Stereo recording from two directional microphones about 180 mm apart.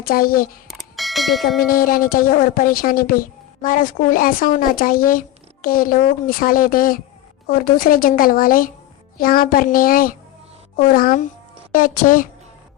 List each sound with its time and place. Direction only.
0.0 s a woman's voice: 55° left (ahead or behind)
0.7 s bell: centre (ahead or behind)
1.5 s a woman's voice: 50° left (ahead or behind)